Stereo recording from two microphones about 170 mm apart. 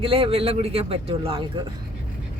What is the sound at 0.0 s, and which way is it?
A man's voice, 35° right (ahead or behind).